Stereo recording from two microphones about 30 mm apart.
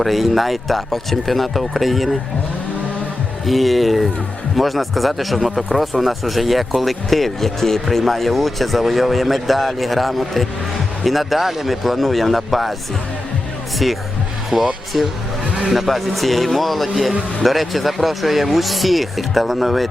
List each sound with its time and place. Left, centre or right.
0.0 s speech: centre
3.4 s speech: centre
13.8 s speech: centre
14.5 s speech: right
14.9 s speech: centre
16.9 s a man's voice: centre